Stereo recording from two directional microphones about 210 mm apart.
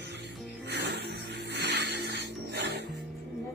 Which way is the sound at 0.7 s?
55° right (ahead or behind).